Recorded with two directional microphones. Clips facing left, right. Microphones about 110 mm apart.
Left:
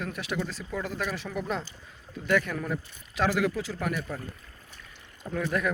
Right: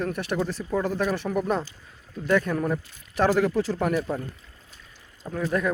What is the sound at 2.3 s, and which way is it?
Speech, 25° right (ahead or behind).